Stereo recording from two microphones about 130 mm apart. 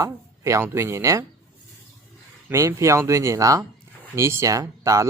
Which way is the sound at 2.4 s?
20° right (ahead or behind).